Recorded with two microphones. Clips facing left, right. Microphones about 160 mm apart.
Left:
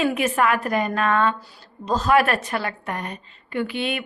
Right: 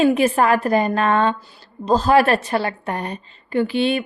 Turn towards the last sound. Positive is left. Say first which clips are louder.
# right 7 dB
turn(degrees=-30)  # may be behind; listen again after turning